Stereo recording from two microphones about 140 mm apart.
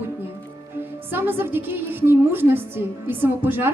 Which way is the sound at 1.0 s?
15° right (ahead or behind).